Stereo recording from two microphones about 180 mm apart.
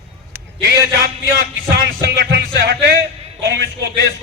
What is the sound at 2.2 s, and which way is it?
Speech, 65° right (ahead or behind).